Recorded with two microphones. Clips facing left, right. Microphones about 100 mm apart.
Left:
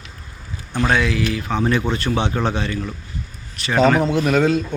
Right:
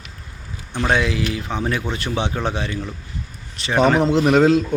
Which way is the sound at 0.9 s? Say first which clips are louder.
Even; 25° right (ahead or behind).